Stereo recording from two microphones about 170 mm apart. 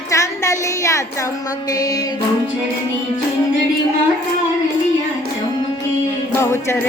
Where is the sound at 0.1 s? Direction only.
20° left (ahead or behind).